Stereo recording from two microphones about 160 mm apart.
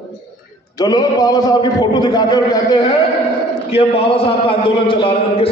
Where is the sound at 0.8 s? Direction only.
25° left (ahead or behind).